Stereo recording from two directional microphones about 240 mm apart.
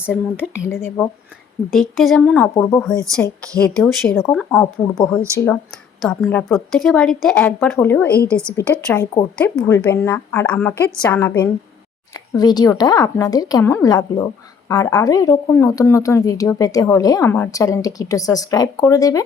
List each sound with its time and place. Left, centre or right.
0.3 s a woman's voice: centre
0.7 s a woman's voice: centre
4.4 s a woman's voice: centre
6.0 s a woman's voice: centre